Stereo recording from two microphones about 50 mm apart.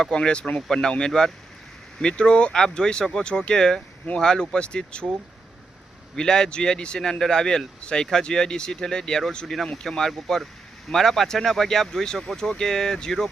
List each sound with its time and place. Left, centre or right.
0.0 s speech: centre
6.1 s speech: centre